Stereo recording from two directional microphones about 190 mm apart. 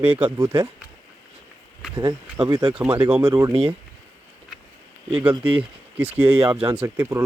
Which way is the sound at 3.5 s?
35° right (ahead or behind).